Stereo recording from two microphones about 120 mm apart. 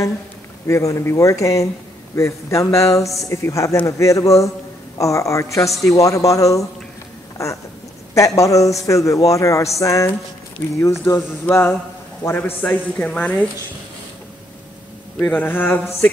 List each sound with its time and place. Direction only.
0.7 s a man's voice: 25° left (ahead or behind)
8.1 s a man's voice: 25° left (ahead or behind)
12.6 s speech: 10° left (ahead or behind)
15.2 s speech: 15° left (ahead or behind)